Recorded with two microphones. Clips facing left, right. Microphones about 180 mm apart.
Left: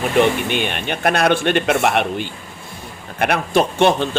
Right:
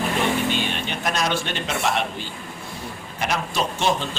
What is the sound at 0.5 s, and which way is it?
Speech, 60° left (ahead or behind).